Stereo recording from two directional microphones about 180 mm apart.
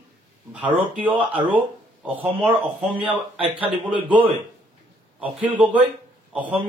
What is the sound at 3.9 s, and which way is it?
Speech, 25° right (ahead or behind).